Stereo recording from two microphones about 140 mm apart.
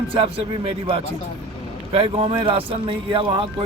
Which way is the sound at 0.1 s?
40° right (ahead or behind).